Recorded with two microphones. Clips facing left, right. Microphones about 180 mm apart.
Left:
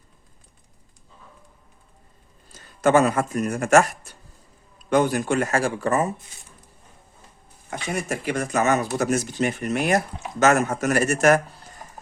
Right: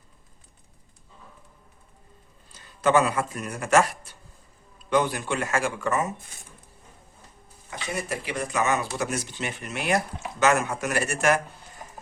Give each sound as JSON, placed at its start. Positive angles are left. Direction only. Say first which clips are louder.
{"t": 2.5, "sound": "a man's voice", "louder": "left 3 dB", "side_deg": 45}
{"t": 7.7, "sound": "speech", "louder": "left 4 dB", "side_deg": 45}